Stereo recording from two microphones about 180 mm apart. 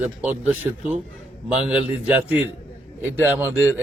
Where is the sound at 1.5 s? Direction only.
5° right (ahead or behind).